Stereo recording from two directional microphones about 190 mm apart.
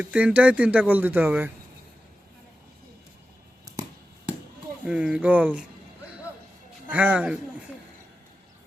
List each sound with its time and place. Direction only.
0.0 s speech: 5° right (ahead or behind)
4.9 s speech: 5° right (ahead or behind)
6.8 s speech: 5° right (ahead or behind)